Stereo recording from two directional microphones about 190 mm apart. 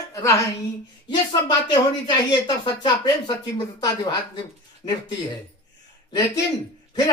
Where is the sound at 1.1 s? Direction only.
20° left (ahead or behind).